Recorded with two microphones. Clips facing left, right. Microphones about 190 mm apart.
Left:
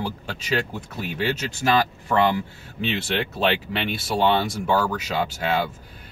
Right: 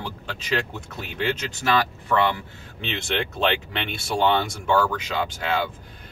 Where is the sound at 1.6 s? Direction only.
35° left (ahead or behind).